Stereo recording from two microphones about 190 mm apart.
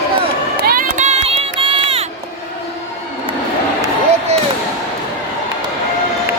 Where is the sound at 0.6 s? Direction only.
50° right (ahead or behind); by 2.0 s 30° right (ahead or behind).